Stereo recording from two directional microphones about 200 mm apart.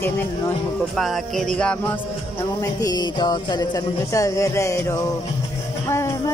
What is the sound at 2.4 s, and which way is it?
Speech, 15° left (ahead or behind).